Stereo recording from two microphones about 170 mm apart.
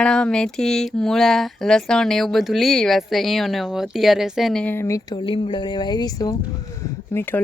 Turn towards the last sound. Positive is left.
turn(degrees=10)  # may be behind; listen again after turning